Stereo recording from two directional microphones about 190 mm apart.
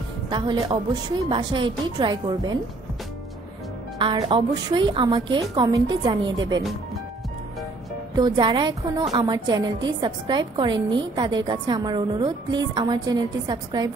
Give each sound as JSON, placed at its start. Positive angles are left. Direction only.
{"t": 0.3, "sound": "a woman's voice", "side_deg": -25}
{"t": 4.0, "sound": "a woman's voice", "side_deg": -25}
{"t": 8.1, "sound": "a woman's voice", "side_deg": -25}